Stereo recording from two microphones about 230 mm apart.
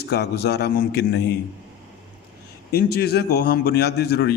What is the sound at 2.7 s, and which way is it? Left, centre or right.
A man's voice, left.